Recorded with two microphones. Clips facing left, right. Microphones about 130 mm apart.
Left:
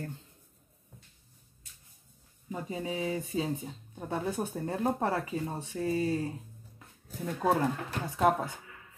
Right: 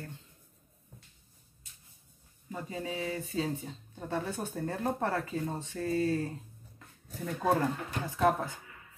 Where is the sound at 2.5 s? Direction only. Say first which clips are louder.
Left 2 dB; 20° left (ahead or behind).